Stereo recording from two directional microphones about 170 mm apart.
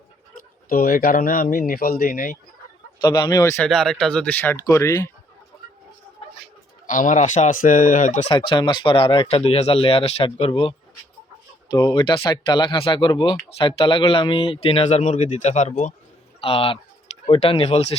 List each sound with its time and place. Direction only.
0.7 s speech: 60° left (ahead or behind)
3.0 s speech: 25° left (ahead or behind)
3.7 s speech: 5° left (ahead or behind)
6.8 s speech: 50° left (ahead or behind)
8.3 s speech: 30° left (ahead or behind); by 15.9 s 45° left (ahead or behind)
16.4 s speech: 35° left (ahead or behind)